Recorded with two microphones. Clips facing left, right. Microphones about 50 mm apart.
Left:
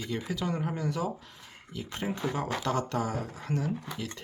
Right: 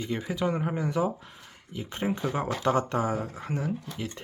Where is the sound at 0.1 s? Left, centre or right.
Right.